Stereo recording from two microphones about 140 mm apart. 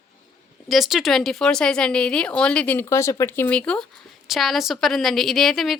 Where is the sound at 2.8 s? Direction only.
20° left (ahead or behind).